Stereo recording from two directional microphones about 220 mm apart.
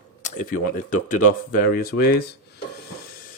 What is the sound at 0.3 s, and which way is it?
Speech, 40° left (ahead or behind).